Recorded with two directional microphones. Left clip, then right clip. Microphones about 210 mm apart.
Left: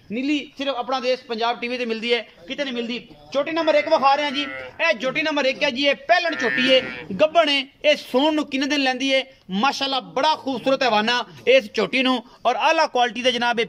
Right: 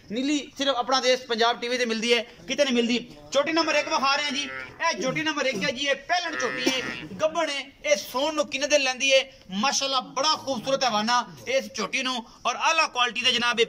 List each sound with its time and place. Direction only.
0.1 s a man's voice: 10° left (ahead or behind)
3.4 s a man's voice: 20° left (ahead or behind); by 13.7 s 35° left (ahead or behind)